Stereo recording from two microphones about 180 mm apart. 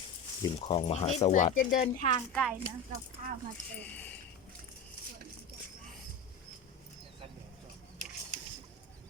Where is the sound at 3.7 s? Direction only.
10° left (ahead or behind).